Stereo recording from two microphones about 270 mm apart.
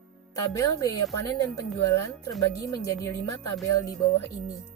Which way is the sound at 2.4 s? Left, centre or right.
Centre.